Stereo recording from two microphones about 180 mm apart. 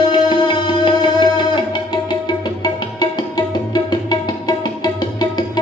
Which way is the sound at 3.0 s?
25° left (ahead or behind).